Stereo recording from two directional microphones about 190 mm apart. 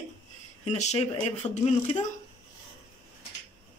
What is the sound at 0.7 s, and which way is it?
Speech, 35° left (ahead or behind).